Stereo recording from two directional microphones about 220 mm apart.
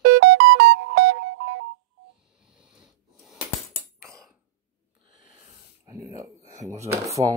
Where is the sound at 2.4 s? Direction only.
5° right (ahead or behind).